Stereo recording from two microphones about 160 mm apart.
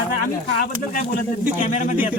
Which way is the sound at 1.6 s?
50° left (ahead or behind).